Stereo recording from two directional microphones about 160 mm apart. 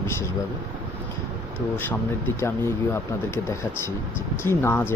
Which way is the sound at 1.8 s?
10° left (ahead or behind).